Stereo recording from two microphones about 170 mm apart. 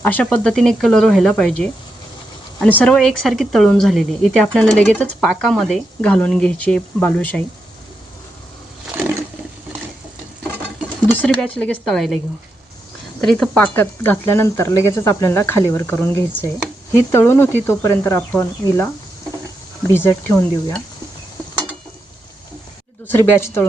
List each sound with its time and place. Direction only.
0.0 s speech: 10° left (ahead or behind)
11.3 s speech: 5° left (ahead or behind)
13.3 s speech: 5° left (ahead or behind)
19.9 s speech: 15° left (ahead or behind)
23.0 s speech: 15° left (ahead or behind)